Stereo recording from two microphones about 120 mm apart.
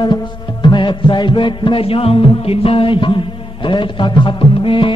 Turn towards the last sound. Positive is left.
turn(degrees=45)  # may be behind; listen again after turning